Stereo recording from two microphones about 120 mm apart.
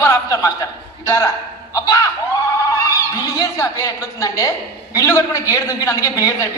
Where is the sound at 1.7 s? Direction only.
30° left (ahead or behind).